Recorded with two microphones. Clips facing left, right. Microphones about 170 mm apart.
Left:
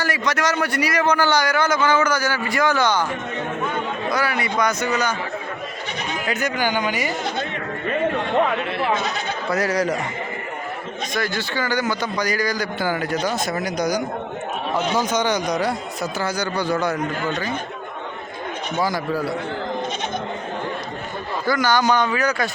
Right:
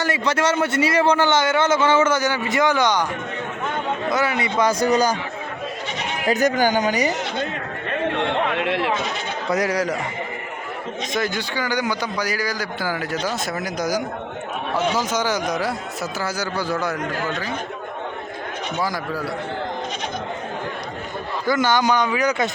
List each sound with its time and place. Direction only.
0.0 s a man's voice: 25° right (ahead or behind)
4.1 s a man's voice: 20° right (ahead or behind)
6.2 s speech: 40° right (ahead or behind)
8.2 s speech: 80° right
9.5 s speech: 15° right (ahead or behind)
11.1 s a man's voice: 15° right (ahead or behind); by 17.0 s centre (ahead or behind)
21.4 s a man's voice: 20° right (ahead or behind)